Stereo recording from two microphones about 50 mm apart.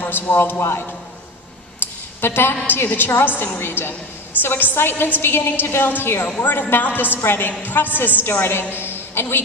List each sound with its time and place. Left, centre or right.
0.0 s a man's voice: left
1.8 s a sound: left
2.2 s a woman's voice: left
4.4 s a woman's voice: left
6.4 s a woman's voice: left